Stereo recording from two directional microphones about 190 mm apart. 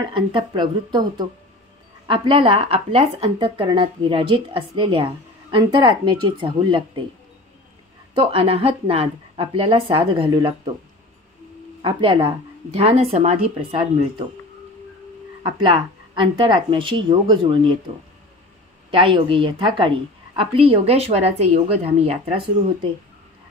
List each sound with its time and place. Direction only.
0.0 s speech: 25° right (ahead or behind)
8.1 s speech: 30° right (ahead or behind)
11.8 s speech: 25° right (ahead or behind)
15.4 s speech: 25° right (ahead or behind)
18.9 s a woman's voice: 25° right (ahead or behind)